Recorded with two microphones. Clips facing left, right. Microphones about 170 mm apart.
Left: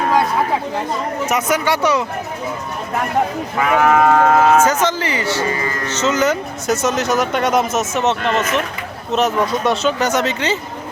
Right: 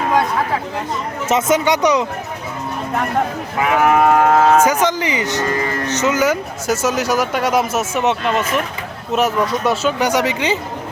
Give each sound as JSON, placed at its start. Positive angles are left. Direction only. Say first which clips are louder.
{"t": 1.3, "sound": "speech", "louder": "right 4 dB", "side_deg": -25}
{"t": 3.8, "sound": "speech", "louder": "even", "side_deg": -10}